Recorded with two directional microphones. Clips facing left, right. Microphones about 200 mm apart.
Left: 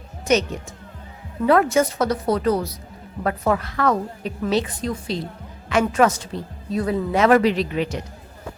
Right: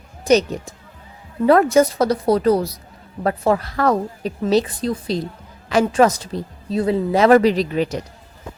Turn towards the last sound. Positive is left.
turn(degrees=-40)  # may be behind; listen again after turning